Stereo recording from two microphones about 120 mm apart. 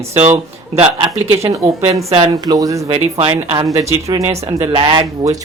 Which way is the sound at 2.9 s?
50° right (ahead or behind).